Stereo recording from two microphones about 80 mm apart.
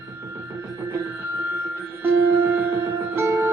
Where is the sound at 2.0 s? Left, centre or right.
Right.